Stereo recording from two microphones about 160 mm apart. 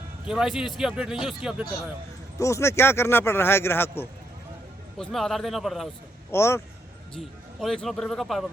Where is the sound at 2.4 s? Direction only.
15° left (ahead or behind).